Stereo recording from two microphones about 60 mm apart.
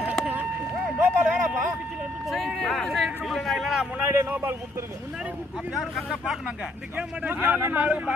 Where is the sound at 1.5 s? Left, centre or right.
Centre.